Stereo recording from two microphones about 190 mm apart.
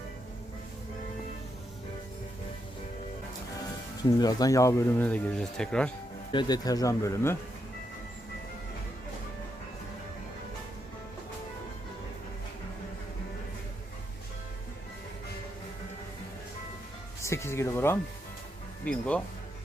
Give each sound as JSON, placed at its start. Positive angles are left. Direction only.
{"t": 4.2, "sound": "speech", "side_deg": 20}
{"t": 6.3, "sound": "speech", "side_deg": 20}
{"t": 17.2, "sound": "music", "side_deg": 15}
{"t": 18.9, "sound": "speech", "side_deg": 5}